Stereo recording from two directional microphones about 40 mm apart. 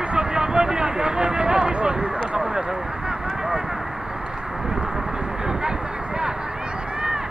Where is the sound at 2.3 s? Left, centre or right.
Right.